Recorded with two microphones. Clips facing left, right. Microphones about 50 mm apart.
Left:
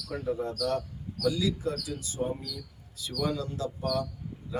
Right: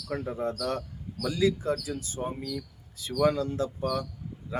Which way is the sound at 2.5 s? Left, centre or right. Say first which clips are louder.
Right 6 dB; right.